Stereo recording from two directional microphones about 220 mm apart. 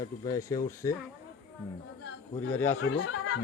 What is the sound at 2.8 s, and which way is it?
Speech, 65° left (ahead or behind).